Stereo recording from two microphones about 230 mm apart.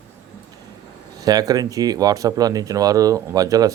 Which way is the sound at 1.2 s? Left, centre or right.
Centre.